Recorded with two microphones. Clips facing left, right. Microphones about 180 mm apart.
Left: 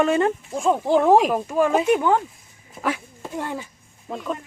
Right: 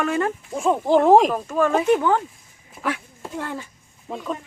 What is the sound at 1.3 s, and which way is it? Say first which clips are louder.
Speech: left 1 dB; 15° left (ahead or behind).